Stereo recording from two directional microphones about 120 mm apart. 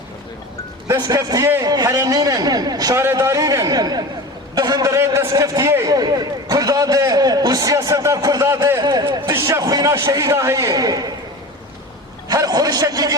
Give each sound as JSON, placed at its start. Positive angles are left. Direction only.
{"t": 0.9, "sound": "a man's voice", "side_deg": -30}
{"t": 8.8, "sound": "a man's voice", "side_deg": -35}
{"t": 9.3, "sound": "a man's voice", "side_deg": -25}
{"t": 12.3, "sound": "a man's voice", "side_deg": -30}